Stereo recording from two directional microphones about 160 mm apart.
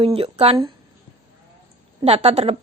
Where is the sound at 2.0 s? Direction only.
40° right (ahead or behind).